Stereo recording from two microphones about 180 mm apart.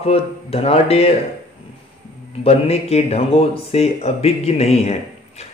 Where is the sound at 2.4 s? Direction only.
35° left (ahead or behind).